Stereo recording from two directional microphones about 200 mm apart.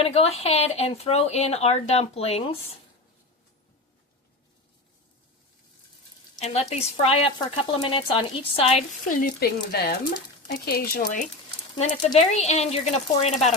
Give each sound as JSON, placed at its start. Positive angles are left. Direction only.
{"t": 0.0, "sound": "speech", "side_deg": 30}
{"t": 6.4, "sound": "a woman's voice", "side_deg": 35}
{"t": 9.2, "sound": "speech", "side_deg": 50}
{"t": 12.0, "sound": "speech", "side_deg": 35}